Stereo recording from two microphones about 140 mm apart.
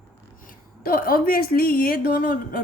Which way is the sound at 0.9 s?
90° left.